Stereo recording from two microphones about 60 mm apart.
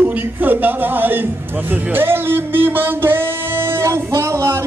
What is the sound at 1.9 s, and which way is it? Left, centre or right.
Music, right.